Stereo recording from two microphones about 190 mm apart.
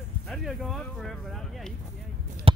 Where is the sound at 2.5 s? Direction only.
30° right (ahead or behind).